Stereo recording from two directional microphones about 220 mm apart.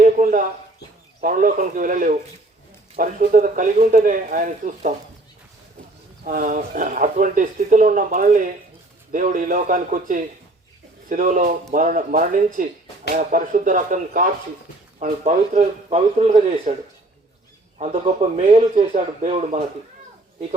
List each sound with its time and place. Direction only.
0.0 s a sound: 35° right (ahead or behind)
1.2 s speech: 35° right (ahead or behind)
6.2 s speech: 40° right (ahead or behind)
17.7 s speech: 30° right (ahead or behind)